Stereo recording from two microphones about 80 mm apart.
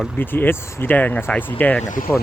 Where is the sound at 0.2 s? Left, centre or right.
Left.